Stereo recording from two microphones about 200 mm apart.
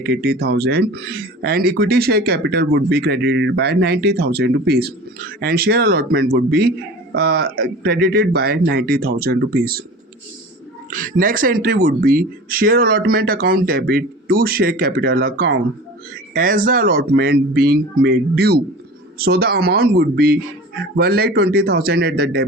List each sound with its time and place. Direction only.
0.0 s speech: 55° right (ahead or behind)
10.9 s speech: 45° right (ahead or behind)